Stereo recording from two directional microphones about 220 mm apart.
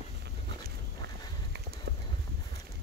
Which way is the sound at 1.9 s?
50° right (ahead or behind).